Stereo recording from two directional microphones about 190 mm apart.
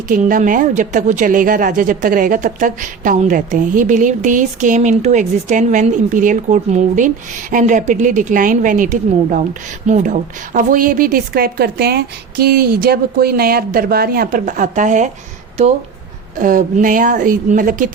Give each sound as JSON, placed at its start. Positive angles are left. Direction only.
{"t": 0.1, "sound": "a woman's voice", "side_deg": -45}
{"t": 16.4, "sound": "a woman's voice", "side_deg": -45}